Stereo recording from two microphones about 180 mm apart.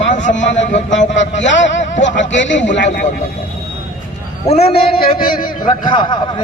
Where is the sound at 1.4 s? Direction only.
90° left.